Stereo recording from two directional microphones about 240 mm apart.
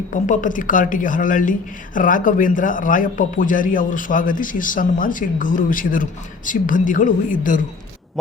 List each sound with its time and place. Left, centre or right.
0.1 s speech: left